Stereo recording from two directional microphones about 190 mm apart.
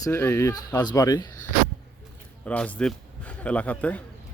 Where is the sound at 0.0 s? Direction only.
10° left (ahead or behind).